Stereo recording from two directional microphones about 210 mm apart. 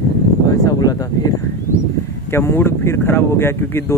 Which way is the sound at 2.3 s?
10° left (ahead or behind).